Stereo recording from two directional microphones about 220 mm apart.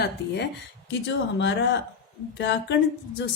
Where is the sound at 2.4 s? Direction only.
55° left (ahead or behind).